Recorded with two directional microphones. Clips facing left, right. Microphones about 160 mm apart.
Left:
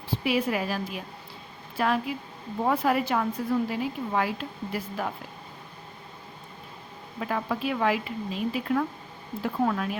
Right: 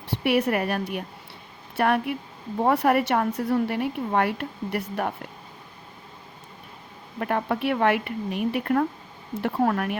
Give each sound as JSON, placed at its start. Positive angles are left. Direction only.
{"t": 0.1, "sound": "a woman's voice", "side_deg": -70}
{"t": 7.2, "sound": "a woman's voice", "side_deg": -55}
{"t": 9.3, "sound": "a woman's voice", "side_deg": -70}